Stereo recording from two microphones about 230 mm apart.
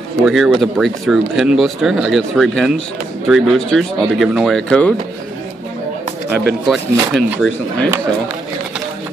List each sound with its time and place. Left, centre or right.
0.2 s speech: centre
6.4 s speech: centre